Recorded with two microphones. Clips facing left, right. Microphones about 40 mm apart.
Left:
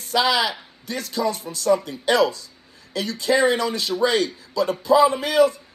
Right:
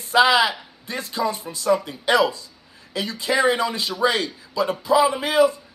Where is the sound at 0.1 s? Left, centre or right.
Right.